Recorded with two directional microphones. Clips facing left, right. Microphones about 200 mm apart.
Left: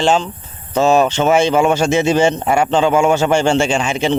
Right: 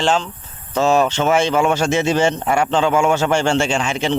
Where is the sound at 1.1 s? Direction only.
20° left (ahead or behind).